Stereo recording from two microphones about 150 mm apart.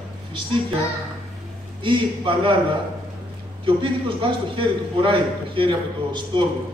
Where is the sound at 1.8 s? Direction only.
35° right (ahead or behind).